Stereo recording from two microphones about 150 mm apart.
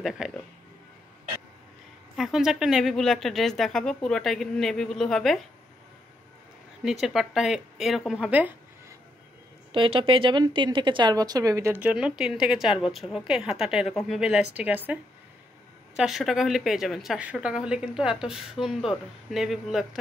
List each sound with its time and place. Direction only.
0.0 s a woman's voice: 5° right (ahead or behind)
2.1 s a woman's voice: centre (ahead or behind)
6.8 s a woman's voice: centre (ahead or behind)
9.7 s a woman's voice: 35° right (ahead or behind); by 15.0 s 10° right (ahead or behind)
16.0 s a woman's voice: centre (ahead or behind)